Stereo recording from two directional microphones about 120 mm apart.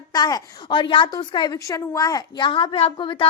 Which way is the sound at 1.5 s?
25° left (ahead or behind).